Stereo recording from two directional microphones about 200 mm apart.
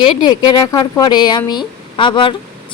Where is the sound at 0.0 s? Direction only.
20° left (ahead or behind).